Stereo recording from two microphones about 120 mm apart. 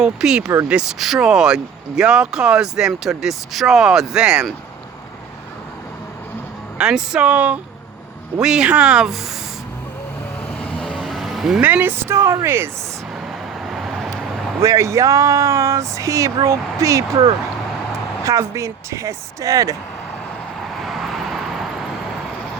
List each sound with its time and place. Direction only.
0.0 s speech: 5° right (ahead or behind)
6.7 s speech: 5° right (ahead or behind)
10.6 s vehicle: 5° left (ahead or behind)
11.6 s speech: 15° right (ahead or behind)
13.7 s vehicle: centre (ahead or behind)
14.6 s speech: 25° right (ahead or behind)
18.3 s speech: 25° right (ahead or behind)
20.8 s vehicle: centre (ahead or behind)